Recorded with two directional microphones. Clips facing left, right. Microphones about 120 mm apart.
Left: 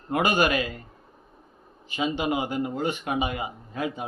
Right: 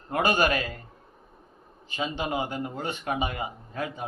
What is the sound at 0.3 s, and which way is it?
Speech, 35° right (ahead or behind).